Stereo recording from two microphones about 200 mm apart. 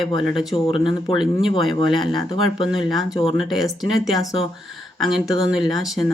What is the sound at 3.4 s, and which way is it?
Speech, centre (ahead or behind).